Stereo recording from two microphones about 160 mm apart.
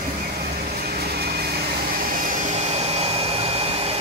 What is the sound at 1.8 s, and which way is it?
Vacuum cleaner, 60° right (ahead or behind).